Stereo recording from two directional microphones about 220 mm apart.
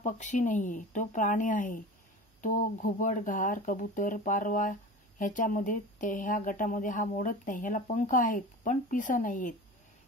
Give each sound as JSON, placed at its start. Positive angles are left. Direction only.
{"t": 0.0, "sound": "speech", "side_deg": 35}